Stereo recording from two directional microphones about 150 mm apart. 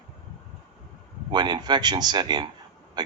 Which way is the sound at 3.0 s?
30° right (ahead or behind).